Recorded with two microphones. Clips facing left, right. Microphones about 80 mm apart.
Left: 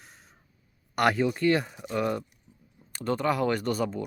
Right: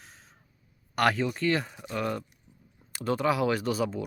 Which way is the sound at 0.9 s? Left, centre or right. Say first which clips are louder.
Left 2 dB; centre.